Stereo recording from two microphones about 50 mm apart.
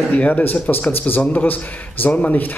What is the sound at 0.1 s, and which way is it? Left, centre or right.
Speech, left.